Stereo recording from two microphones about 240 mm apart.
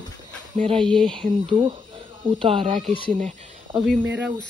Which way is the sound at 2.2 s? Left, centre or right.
Right.